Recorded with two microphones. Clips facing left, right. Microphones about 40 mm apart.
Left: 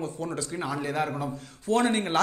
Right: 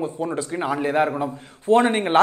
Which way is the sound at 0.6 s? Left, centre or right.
Right.